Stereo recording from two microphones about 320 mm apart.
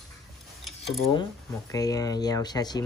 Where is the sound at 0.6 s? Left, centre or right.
Centre.